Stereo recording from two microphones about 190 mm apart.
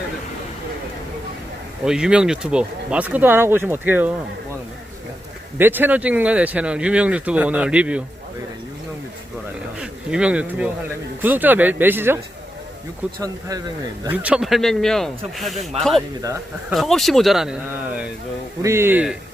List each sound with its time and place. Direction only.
1.8 s speech: 5° right (ahead or behind)
5.5 s speech: 10° right (ahead or behind)
9.8 s speech: 5° right (ahead or behind)
14.1 s speech: 5° right (ahead or behind)
16.2 s speech: 15° right (ahead or behind)
16.7 s speech: centre (ahead or behind)
18.6 s speech: 15° right (ahead or behind)